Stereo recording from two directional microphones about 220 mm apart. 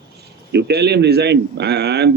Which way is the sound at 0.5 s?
50° right (ahead or behind).